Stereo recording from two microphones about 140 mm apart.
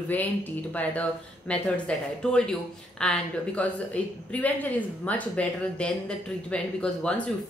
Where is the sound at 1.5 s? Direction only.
10° left (ahead or behind).